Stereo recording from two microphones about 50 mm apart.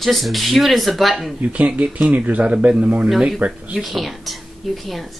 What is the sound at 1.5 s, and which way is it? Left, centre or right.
A man's voice, right.